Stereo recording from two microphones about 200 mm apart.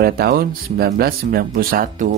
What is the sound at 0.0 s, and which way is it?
Speech, 50° right (ahead or behind).